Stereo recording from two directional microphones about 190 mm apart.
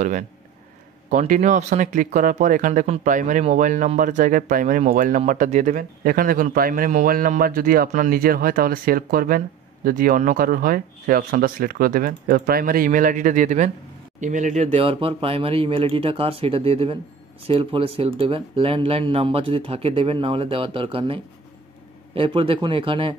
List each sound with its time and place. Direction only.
1.1 s speech: 40° right (ahead or behind)